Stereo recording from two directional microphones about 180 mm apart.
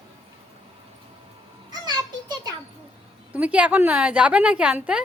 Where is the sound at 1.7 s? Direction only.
25° right (ahead or behind).